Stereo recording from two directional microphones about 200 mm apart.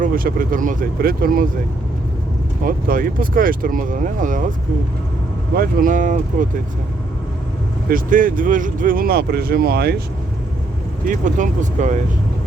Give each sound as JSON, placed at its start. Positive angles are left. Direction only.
{"t": 0.0, "sound": "speech", "side_deg": -45}
{"t": 2.6, "sound": "speech", "side_deg": -45}
{"t": 5.5, "sound": "speech", "side_deg": -40}
{"t": 7.9, "sound": "speech", "side_deg": -45}
{"t": 11.0, "sound": "speech", "side_deg": -40}